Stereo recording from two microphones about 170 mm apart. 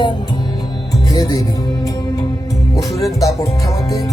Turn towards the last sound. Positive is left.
turn(degrees=20)  # may be behind; listen again after turning